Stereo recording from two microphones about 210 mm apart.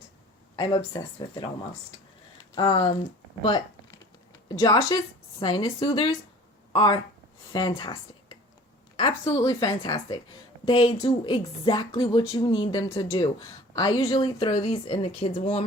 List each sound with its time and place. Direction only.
0.5 s speech: 20° left (ahead or behind)
4.3 s a sound: 20° left (ahead or behind)
5.4 s speech: 25° left (ahead or behind)